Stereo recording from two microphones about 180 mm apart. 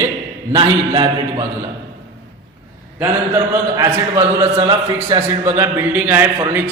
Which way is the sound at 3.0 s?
15° right (ahead or behind).